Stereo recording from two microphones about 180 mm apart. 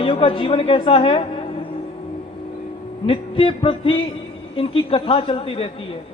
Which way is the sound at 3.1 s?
30° left (ahead or behind).